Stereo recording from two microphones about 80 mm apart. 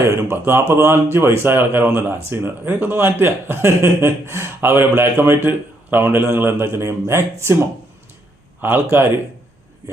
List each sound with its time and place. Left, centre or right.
0.0 s speech: right